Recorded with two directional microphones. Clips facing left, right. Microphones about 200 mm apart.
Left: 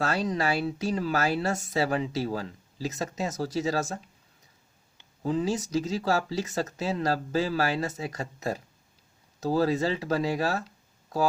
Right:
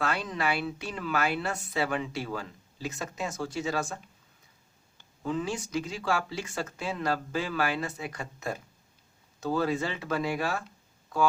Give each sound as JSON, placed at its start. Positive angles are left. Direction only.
{"t": 0.0, "sound": "speech", "side_deg": 40}
{"t": 5.2, "sound": "speech", "side_deg": 35}